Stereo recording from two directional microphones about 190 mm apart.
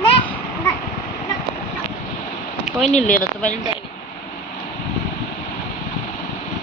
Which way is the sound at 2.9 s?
45° left (ahead or behind).